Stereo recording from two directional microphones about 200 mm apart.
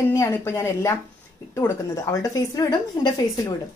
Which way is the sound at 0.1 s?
15° left (ahead or behind).